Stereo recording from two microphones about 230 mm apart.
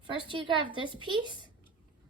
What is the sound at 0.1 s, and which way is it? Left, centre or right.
Speech, right.